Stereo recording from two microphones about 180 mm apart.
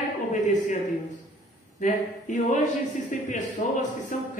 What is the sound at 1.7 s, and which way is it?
Speech, 45° left (ahead or behind).